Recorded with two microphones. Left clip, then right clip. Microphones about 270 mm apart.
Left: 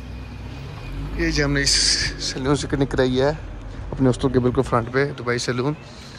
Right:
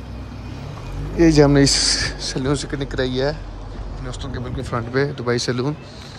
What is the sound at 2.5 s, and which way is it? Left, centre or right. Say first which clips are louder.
Speech: left 2 dB; centre.